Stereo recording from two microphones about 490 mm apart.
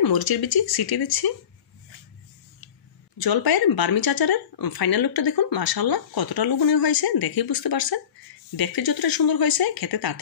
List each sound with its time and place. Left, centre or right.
0.0 s speech: left
3.2 s speech: left